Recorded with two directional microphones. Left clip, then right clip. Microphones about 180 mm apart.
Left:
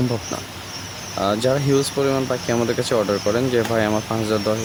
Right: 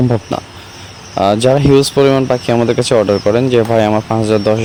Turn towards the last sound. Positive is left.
turn(degrees=-35)  # may be behind; listen again after turning